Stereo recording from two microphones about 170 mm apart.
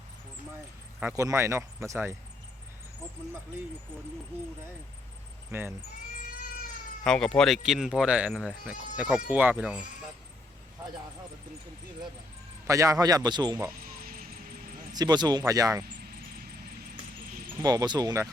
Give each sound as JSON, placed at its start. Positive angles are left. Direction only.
{"t": 1.1, "sound": "speech", "side_deg": -20}
{"t": 5.5, "sound": "speech", "side_deg": -10}
{"t": 7.0, "sound": "speech", "side_deg": 5}
{"t": 12.6, "sound": "a man's voice", "side_deg": -20}
{"t": 13.8, "sound": "vehicle", "side_deg": -60}
{"t": 14.9, "sound": "a man's voice", "side_deg": -25}
{"t": 17.6, "sound": "a man's voice", "side_deg": -20}